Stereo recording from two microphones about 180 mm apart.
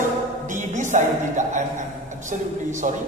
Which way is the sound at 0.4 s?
45° right (ahead or behind).